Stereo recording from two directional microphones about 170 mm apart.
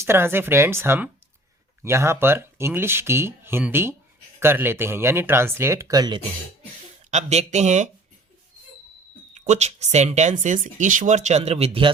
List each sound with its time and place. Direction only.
0.0 s speech: 15° right (ahead or behind)
7.1 s speech: 40° right (ahead or behind)
9.3 s speech: 45° right (ahead or behind)